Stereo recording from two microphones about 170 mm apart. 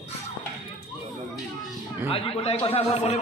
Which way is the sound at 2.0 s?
35° left (ahead or behind).